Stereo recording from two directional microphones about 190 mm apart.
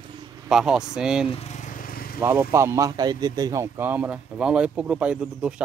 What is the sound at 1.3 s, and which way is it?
Vehicle, 35° left (ahead or behind).